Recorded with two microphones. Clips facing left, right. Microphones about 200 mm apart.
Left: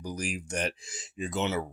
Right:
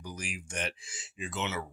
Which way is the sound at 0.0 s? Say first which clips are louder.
Left 7 dB; 40° left (ahead or behind).